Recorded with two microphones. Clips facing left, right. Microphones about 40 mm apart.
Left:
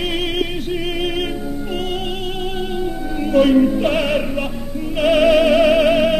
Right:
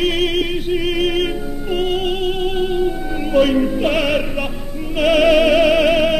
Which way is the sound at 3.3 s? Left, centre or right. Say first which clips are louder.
Left 2 dB; centre.